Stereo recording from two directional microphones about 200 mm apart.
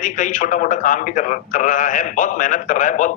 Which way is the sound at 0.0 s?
40° left (ahead or behind).